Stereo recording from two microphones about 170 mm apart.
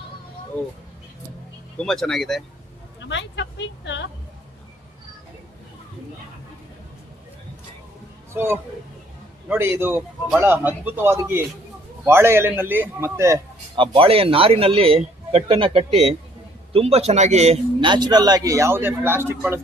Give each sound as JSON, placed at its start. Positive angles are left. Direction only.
{"t": 1.8, "sound": "speech", "side_deg": 0}
{"t": 3.0, "sound": "speech", "side_deg": 90}
{"t": 8.3, "sound": "a man's voice", "side_deg": -15}
{"t": 13.7, "sound": "speech", "side_deg": -30}